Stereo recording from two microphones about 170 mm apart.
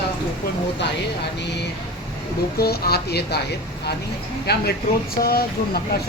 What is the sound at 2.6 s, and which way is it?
Speech, 65° left (ahead or behind).